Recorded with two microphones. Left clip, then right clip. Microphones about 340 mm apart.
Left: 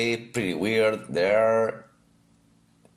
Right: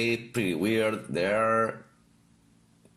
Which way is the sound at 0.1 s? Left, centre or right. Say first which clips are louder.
Left 1 dB; centre.